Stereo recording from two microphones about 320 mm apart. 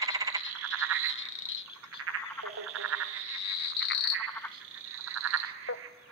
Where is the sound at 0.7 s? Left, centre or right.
Right.